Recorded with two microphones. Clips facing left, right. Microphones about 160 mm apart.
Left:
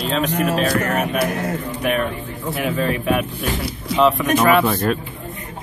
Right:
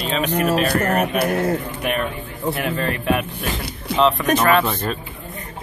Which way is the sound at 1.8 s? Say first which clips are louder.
Left 3 dB; centre (ahead or behind).